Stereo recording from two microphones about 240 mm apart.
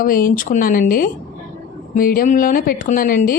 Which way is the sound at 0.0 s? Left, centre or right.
Left.